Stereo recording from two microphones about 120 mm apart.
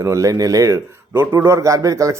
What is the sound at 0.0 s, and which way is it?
A man's voice, 25° right (ahead or behind).